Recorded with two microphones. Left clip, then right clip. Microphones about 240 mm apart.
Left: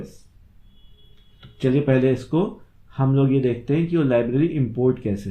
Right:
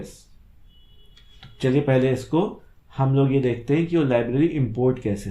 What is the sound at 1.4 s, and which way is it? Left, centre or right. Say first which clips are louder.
Speech: even; right.